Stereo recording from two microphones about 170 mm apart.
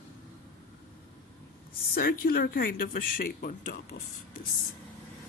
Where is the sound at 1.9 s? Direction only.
60° left (ahead or behind).